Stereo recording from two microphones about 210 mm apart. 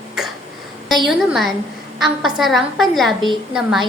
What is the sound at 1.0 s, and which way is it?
A woman's voice, centre (ahead or behind).